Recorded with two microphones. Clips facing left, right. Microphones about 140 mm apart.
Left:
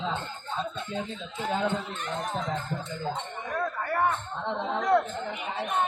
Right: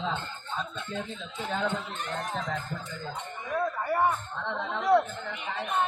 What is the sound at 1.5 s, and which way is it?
Speech, 10° left (ahead or behind).